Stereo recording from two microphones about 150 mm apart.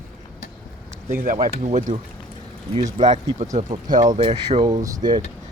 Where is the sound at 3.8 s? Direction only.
25° right (ahead or behind).